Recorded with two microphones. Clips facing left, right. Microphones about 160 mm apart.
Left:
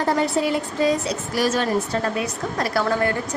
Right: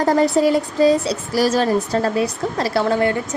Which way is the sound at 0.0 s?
40° right (ahead or behind).